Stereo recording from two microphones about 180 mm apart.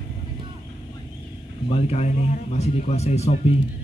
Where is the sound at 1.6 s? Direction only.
35° left (ahead or behind).